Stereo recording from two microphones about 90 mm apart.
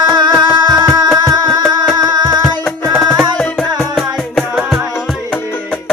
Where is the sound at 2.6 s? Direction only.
Centre (ahead or behind).